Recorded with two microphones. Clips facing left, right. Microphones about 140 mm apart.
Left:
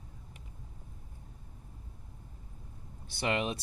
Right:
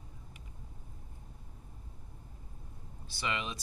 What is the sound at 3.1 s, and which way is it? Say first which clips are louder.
Speech: left 6 dB; 60° left (ahead or behind).